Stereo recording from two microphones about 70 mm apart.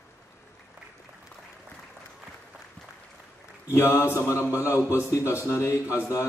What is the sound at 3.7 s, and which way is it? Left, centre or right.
A man's voice, left.